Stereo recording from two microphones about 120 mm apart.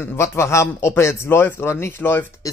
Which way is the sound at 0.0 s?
20° left (ahead or behind).